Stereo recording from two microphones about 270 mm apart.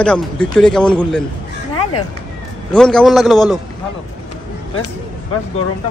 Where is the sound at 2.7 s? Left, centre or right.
Centre.